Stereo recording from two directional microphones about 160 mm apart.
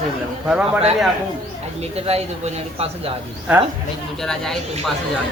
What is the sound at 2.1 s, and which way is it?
A man's voice, 40° right (ahead or behind).